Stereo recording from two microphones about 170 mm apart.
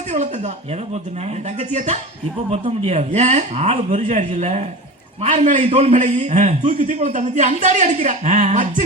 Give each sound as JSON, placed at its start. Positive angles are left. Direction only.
{"t": 0.1, "sound": "speech", "side_deg": -45}
{"t": 1.5, "sound": "speech", "side_deg": -40}